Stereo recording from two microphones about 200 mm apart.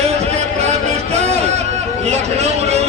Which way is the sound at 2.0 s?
35° right (ahead or behind).